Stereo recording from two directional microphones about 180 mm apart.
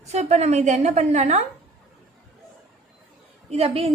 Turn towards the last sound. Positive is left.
turn(degrees=-35)  # may be behind; listen again after turning